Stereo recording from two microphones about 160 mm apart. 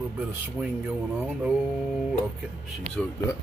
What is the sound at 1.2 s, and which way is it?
Speech, 5° right (ahead or behind).